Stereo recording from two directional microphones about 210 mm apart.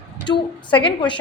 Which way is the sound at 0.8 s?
25° left (ahead or behind).